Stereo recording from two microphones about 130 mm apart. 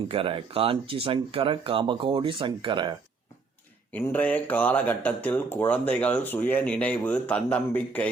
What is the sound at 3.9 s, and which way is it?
Speech, 10° left (ahead or behind).